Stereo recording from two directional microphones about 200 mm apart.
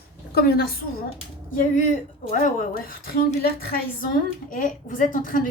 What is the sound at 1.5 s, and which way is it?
A woman's voice, 40° left (ahead or behind).